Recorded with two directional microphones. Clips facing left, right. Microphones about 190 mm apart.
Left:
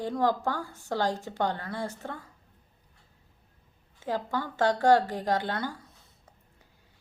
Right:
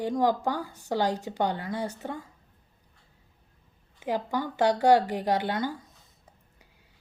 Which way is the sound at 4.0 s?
15° right (ahead or behind).